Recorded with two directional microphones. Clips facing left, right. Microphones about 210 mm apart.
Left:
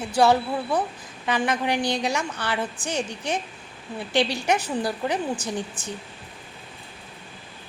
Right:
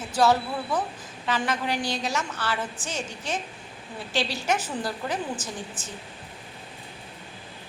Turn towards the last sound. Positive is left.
turn(degrees=15)  # may be behind; listen again after turning